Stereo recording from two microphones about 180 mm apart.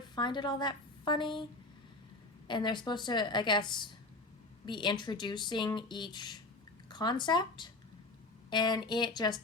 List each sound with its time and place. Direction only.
0.2 s speech: 25° left (ahead or behind)
2.5 s speech: 25° left (ahead or behind)